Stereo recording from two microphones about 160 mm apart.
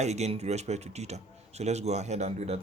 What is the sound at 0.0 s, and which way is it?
Speech, 45° right (ahead or behind).